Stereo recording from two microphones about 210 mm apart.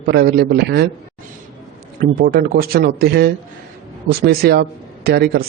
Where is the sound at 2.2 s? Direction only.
50° right (ahead or behind).